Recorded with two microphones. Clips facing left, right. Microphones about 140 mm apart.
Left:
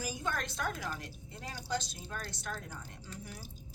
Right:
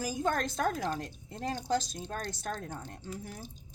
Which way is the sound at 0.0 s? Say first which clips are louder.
Right 6 dB; 45° right (ahead or behind).